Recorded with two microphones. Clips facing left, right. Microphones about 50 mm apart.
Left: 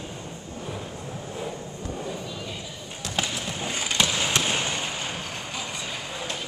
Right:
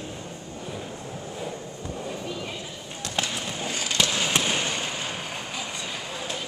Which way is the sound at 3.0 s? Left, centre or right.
Centre.